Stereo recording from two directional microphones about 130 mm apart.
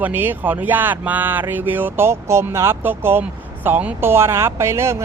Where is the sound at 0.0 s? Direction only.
15° right (ahead or behind).